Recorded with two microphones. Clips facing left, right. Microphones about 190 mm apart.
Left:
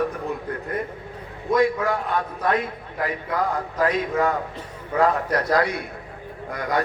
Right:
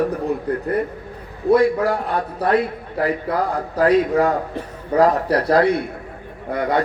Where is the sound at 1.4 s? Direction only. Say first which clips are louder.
Right 5 dB; 35° right (ahead or behind).